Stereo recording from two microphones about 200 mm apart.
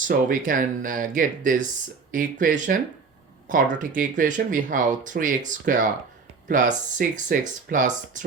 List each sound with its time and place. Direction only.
0.0 s speech: 45° right (ahead or behind)